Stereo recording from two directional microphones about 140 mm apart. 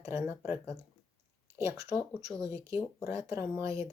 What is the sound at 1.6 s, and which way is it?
Speech, 20° right (ahead or behind).